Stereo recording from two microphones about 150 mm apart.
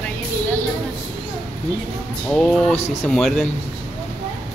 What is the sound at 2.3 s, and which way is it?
Speech, 5° left (ahead or behind).